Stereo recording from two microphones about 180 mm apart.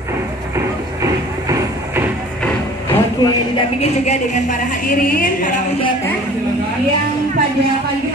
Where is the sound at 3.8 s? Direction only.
40° left (ahead or behind).